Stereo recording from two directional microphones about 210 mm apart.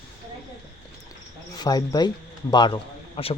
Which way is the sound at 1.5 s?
20° left (ahead or behind).